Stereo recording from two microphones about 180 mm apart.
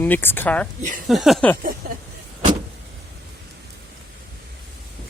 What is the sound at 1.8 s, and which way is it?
Vehicle, 55° right (ahead or behind).